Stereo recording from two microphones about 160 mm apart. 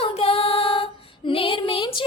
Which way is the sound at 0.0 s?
40° left (ahead or behind).